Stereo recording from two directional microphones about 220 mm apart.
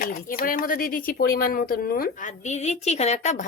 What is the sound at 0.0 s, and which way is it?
A woman's voice, 40° left (ahead or behind).